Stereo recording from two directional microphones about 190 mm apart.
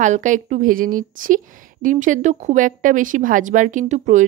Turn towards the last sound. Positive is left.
turn(degrees=-40)  # may be behind; listen again after turning